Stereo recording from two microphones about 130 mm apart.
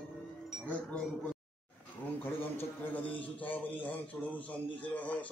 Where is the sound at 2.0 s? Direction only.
15° left (ahead or behind).